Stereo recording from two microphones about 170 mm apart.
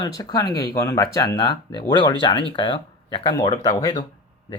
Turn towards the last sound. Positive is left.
turn(degrees=30)  # may be behind; listen again after turning